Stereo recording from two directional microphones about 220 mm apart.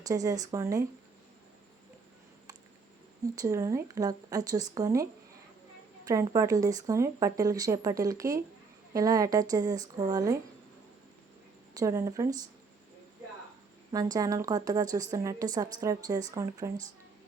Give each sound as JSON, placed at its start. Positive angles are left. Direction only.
{"t": 0.0, "sound": "a woman's voice", "side_deg": -15}
{"t": 3.3, "sound": "a woman's voice", "side_deg": -15}
{"t": 6.1, "sound": "a woman's voice", "side_deg": -15}
{"t": 11.7, "sound": "a woman's voice", "side_deg": -15}
{"t": 13.9, "sound": "a woman's voice", "side_deg": -15}